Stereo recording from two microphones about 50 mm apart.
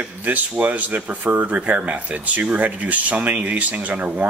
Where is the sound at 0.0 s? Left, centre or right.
Right.